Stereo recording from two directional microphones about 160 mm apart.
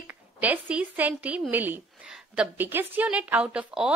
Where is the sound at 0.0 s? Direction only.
10° right (ahead or behind).